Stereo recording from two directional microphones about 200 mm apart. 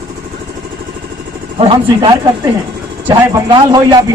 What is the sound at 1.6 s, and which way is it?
Speech, 25° right (ahead or behind).